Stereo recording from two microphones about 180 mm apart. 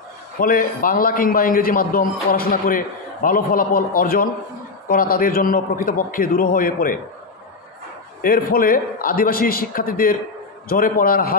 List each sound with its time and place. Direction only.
0.4 s a man's voice: 50° left (ahead or behind)
8.2 s a man's voice: 55° left (ahead or behind)